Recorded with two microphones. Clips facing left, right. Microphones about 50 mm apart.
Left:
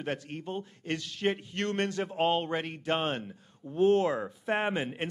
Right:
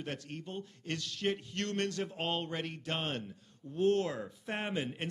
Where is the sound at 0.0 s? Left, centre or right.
Centre.